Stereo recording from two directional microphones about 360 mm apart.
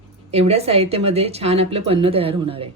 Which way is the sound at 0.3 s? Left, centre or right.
Centre.